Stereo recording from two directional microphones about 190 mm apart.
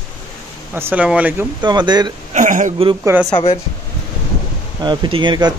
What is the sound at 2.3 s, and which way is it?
Speech, 40° right (ahead or behind).